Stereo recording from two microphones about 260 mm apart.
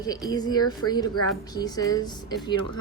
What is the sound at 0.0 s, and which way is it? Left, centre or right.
Speech, centre.